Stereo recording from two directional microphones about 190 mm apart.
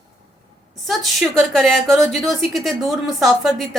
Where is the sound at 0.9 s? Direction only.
Centre (ahead or behind).